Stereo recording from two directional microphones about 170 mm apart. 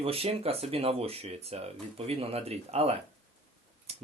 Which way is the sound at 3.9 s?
35° right (ahead or behind).